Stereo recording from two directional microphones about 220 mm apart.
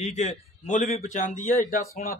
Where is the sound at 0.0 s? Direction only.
30° left (ahead or behind).